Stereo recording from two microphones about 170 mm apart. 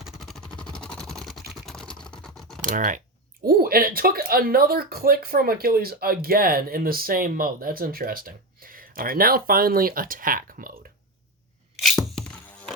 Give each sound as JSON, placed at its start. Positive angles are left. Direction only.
{"t": 0.0, "sound": "vehicle", "side_deg": 0}
{"t": 1.6, "sound": "computer keyboard", "side_deg": 5}
{"t": 2.6, "sound": "speech", "side_deg": -50}
{"t": 3.4, "sound": "speech", "side_deg": -60}
{"t": 11.8, "sound": "music", "side_deg": 0}